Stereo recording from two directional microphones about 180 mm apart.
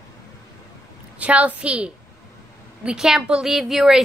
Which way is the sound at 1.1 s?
5° right (ahead or behind).